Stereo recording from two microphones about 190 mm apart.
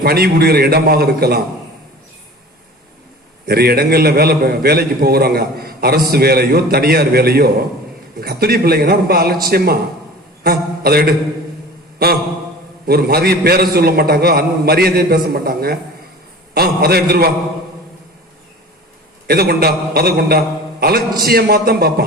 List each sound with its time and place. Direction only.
0.0 s a man's voice: 55° right (ahead or behind)
3.4 s a man's voice: 55° right (ahead or behind)
11.9 s a sound: 55° right (ahead or behind)
12.9 s a man's voice: 55° right (ahead or behind)
19.3 s a man's voice: 55° right (ahead or behind)